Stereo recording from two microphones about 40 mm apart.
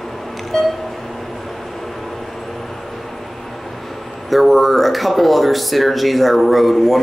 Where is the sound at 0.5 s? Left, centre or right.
Centre.